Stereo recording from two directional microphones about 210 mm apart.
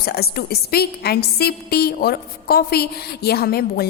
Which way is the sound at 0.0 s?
50° left (ahead or behind).